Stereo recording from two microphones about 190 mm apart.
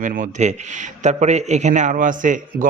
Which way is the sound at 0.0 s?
45° right (ahead or behind).